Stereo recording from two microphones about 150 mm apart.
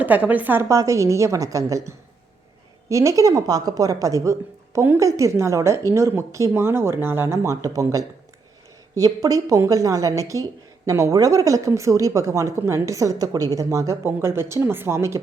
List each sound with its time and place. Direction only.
0.0 s a woman's voice: 10° right (ahead or behind)
2.9 s a woman's voice: 20° right (ahead or behind)